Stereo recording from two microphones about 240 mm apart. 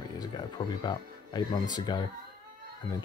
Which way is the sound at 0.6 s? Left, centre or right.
Centre.